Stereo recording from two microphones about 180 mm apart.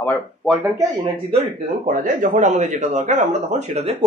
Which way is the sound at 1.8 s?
45° right (ahead or behind).